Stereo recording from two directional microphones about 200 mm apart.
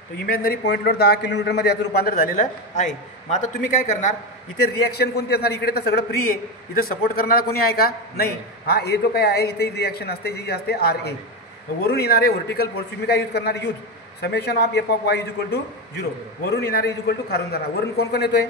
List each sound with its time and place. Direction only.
0.3 s a man's voice: 45° left (ahead or behind)
4.8 s a man's voice: 50° left (ahead or behind)